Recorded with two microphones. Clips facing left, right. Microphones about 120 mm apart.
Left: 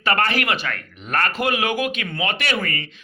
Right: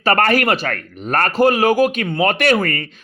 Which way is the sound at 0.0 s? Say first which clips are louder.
Right 6 dB; 45° right (ahead or behind).